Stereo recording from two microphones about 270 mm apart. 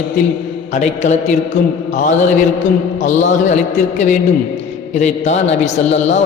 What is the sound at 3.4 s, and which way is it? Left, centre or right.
A man's voice, left.